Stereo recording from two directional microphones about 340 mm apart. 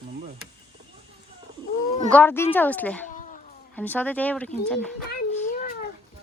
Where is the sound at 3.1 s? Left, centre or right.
Left.